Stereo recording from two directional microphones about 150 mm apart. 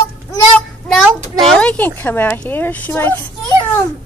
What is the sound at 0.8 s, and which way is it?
A child's voice, centre (ahead or behind).